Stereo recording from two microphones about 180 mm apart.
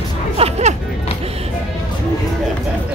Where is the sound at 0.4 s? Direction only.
40° right (ahead or behind).